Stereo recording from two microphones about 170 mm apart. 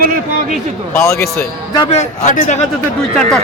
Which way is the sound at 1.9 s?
45° left (ahead or behind).